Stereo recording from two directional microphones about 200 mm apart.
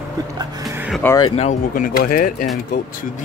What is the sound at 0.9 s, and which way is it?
Speech, 5° left (ahead or behind).